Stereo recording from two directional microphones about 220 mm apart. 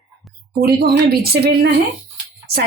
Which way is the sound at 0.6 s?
45° right (ahead or behind).